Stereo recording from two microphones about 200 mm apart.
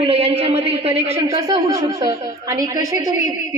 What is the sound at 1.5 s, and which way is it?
A woman's voice, 20° right (ahead or behind).